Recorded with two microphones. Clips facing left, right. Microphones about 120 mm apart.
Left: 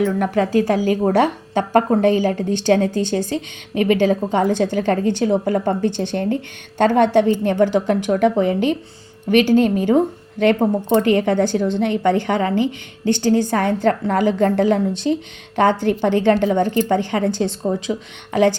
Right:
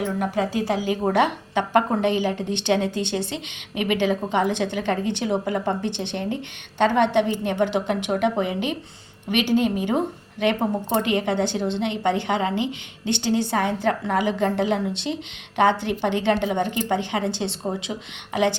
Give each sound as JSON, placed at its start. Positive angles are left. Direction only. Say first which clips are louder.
{"t": 0.0, "sound": "a woman's voice", "louder": "left 6 dB", "side_deg": 50}